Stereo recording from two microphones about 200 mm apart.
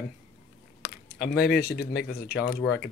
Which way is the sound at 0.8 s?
45° left (ahead or behind).